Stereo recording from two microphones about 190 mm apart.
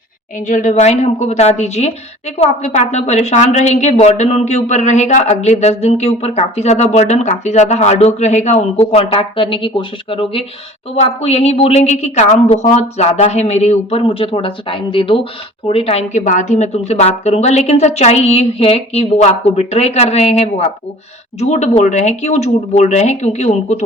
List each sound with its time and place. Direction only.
0.3 s speech: 40° left (ahead or behind)